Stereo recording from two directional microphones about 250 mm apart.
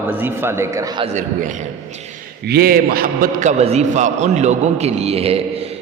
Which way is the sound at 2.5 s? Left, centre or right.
Right.